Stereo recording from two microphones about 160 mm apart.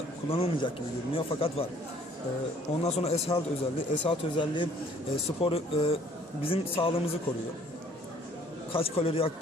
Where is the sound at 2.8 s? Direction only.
40° left (ahead or behind).